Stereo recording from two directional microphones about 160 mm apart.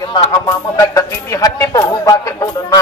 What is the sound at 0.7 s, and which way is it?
Speech, 20° left (ahead or behind).